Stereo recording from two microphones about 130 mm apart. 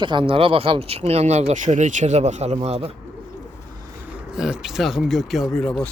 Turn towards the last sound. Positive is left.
turn(degrees=5)  # may be behind; listen again after turning